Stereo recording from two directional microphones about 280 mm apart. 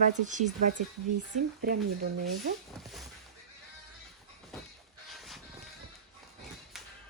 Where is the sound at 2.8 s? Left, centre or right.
Centre.